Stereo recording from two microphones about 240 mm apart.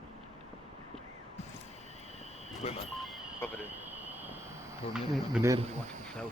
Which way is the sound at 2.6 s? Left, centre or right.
Left.